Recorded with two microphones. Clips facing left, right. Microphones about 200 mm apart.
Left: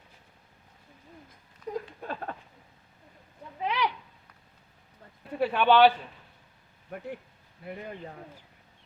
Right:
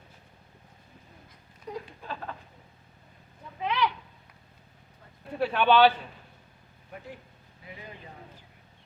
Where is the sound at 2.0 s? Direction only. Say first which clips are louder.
Left 2 dB; 55° left (ahead or behind).